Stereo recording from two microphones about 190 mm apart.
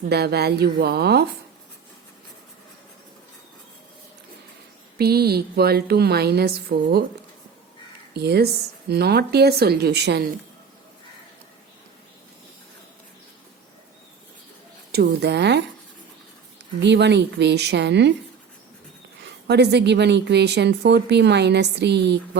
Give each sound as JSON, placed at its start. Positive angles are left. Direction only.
{"t": 0.0, "sound": "a woman's voice", "side_deg": -60}
{"t": 4.9, "sound": "a woman's voice", "side_deg": -55}
{"t": 8.1, "sound": "a woman's voice", "side_deg": -60}
{"t": 14.9, "sound": "a woman's voice", "side_deg": -55}
{"t": 16.8, "sound": "a woman's voice", "side_deg": -65}
{"t": 19.5, "sound": "a woman's voice", "side_deg": -60}